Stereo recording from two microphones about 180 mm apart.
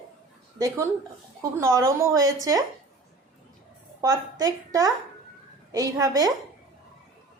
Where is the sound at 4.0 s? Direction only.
20° right (ahead or behind).